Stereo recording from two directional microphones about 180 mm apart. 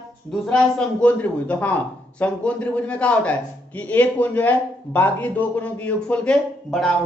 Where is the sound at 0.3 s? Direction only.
5° left (ahead or behind).